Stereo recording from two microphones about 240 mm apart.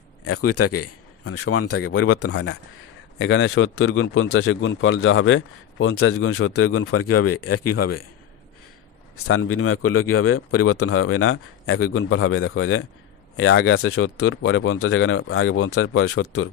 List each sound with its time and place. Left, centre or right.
0.3 s a man's voice: left
3.2 s a man's voice: left
9.3 s a man's voice: left